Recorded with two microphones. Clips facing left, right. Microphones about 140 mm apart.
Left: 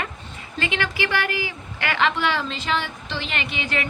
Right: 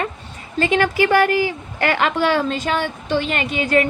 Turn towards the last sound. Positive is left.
turn(degrees=-45)  # may be behind; listen again after turning